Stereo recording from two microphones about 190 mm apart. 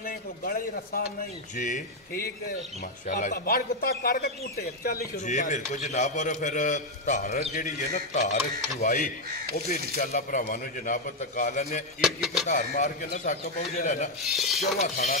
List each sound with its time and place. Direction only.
0.0 s a man's voice: 50° left (ahead or behind)
12.0 s speech: centre (ahead or behind)
12.4 s speech: 40° left (ahead or behind)
14.2 s speech: centre (ahead or behind)
14.8 s speech: 35° left (ahead or behind)